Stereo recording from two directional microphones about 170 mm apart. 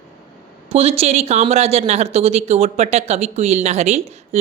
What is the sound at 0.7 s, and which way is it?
Speech, 35° right (ahead or behind).